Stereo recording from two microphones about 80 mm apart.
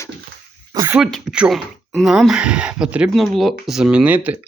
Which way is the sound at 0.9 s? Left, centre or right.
Centre.